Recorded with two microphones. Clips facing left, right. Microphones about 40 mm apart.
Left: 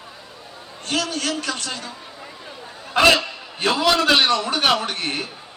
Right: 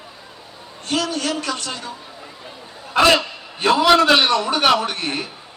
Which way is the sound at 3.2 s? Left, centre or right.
Right.